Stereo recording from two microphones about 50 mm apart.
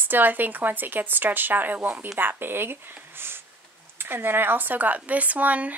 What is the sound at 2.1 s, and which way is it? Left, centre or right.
Speech, right.